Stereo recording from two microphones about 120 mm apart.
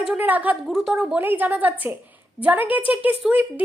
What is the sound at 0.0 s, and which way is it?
A woman's voice, 10° right (ahead or behind).